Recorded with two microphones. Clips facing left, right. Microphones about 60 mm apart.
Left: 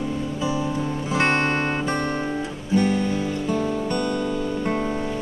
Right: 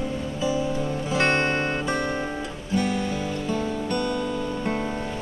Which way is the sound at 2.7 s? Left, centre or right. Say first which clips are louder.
Left 4 dB; centre.